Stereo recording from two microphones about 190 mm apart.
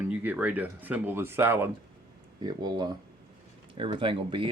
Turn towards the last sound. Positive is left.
turn(degrees=-25)  # may be behind; listen again after turning